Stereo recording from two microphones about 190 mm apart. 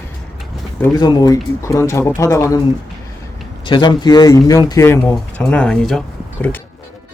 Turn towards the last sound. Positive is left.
turn(degrees=5)  # may be behind; listen again after turning